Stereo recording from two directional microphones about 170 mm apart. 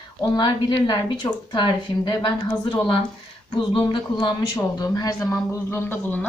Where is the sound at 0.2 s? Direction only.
25° left (ahead or behind).